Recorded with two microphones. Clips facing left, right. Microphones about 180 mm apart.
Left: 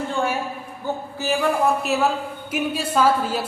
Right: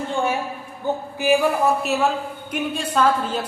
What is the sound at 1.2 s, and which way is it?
Speech, 15° right (ahead or behind).